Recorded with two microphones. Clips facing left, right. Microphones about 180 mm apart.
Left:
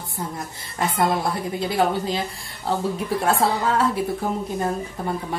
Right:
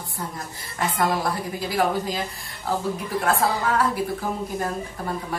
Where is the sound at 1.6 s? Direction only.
25° left (ahead or behind).